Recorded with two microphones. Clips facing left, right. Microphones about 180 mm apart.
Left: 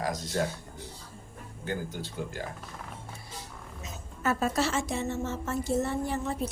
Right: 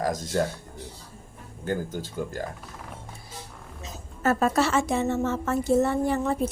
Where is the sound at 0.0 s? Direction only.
45° right (ahead or behind).